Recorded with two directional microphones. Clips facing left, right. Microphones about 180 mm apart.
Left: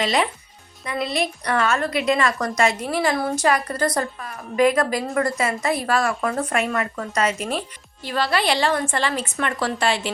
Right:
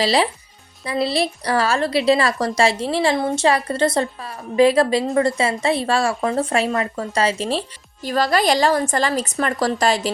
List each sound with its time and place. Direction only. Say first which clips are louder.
0.0 s a woman's voice: right 3 dB; 30° right (ahead or behind)
8.0 s a woman's voice: right 4 dB; 40° right (ahead or behind)